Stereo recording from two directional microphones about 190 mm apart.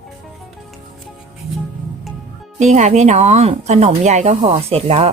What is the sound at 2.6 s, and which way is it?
Speech, 40° right (ahead or behind).